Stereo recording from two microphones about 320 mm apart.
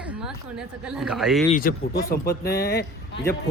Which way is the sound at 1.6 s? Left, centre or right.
Left.